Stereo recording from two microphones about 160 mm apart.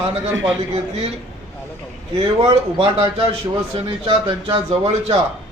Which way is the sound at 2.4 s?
35° right (ahead or behind).